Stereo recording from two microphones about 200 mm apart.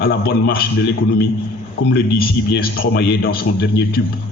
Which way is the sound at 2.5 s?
55° left (ahead or behind).